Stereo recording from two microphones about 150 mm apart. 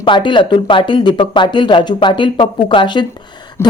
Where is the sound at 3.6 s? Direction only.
15° left (ahead or behind).